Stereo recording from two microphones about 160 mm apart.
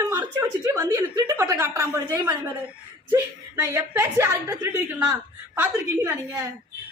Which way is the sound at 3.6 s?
20° right (ahead or behind).